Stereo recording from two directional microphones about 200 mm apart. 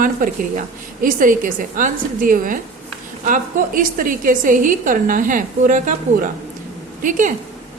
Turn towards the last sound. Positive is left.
turn(degrees=-40)  # may be behind; listen again after turning